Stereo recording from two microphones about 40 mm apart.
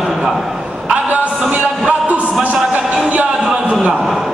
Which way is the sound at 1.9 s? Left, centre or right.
Right.